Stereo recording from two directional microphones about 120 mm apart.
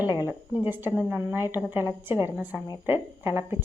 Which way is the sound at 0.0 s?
20° right (ahead or behind).